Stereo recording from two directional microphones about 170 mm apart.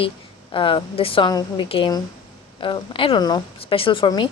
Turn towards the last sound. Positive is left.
turn(degrees=25)  # may be behind; listen again after turning